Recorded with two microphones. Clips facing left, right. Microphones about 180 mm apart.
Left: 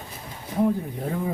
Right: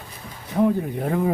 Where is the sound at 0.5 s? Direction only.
70° right (ahead or behind).